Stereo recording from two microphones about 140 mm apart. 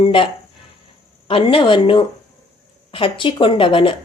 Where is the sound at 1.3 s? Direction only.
40° left (ahead or behind).